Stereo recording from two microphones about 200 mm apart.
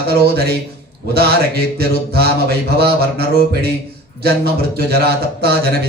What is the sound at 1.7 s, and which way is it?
Mantra, 50° right (ahead or behind).